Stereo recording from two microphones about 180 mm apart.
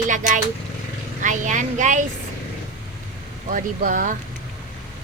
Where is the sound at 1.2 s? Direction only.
45° right (ahead or behind).